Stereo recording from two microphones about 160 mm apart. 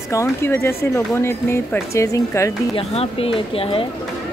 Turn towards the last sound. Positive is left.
turn(degrees=35)  # may be behind; listen again after turning